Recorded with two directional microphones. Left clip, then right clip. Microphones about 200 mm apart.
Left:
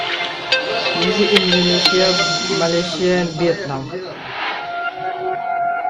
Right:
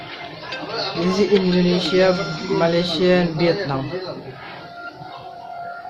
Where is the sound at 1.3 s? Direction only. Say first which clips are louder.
Left 4 dB; 45° left (ahead or behind).